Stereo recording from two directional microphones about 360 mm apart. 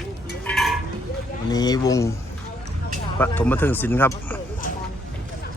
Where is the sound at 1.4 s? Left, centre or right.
Centre.